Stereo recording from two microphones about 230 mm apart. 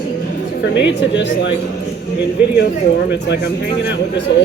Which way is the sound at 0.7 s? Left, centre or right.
Left.